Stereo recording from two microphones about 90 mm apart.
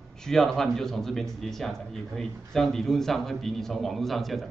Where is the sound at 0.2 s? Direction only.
5° left (ahead or behind).